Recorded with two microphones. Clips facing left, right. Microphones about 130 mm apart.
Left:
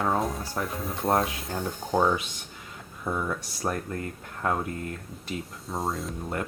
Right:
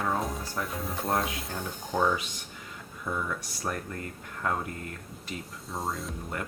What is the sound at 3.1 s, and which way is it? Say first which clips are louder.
Speech: left 3 dB; 30° left (ahead or behind).